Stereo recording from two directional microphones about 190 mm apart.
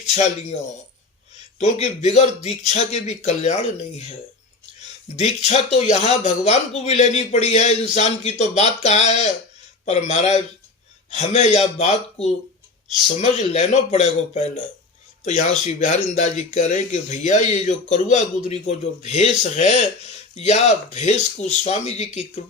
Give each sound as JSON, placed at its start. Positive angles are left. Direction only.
{"t": 0.0, "sound": "speech", "side_deg": 35}
{"t": 1.8, "sound": "speech", "side_deg": 35}
{"t": 5.1, "sound": "speech", "side_deg": 35}